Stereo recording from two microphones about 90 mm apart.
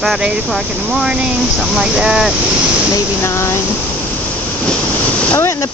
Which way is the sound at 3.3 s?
30° left (ahead or behind).